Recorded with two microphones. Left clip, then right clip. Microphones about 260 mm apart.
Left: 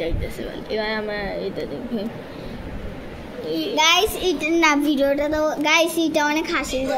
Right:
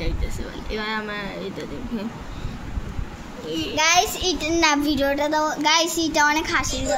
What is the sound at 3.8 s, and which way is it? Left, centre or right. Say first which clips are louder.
A child's voice: left 1 dB; centre.